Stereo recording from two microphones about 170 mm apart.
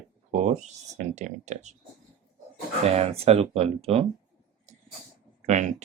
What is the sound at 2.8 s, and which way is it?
Speech, 35° right (ahead or behind).